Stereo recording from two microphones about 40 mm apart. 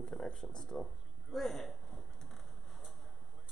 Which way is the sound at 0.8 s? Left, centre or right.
Centre.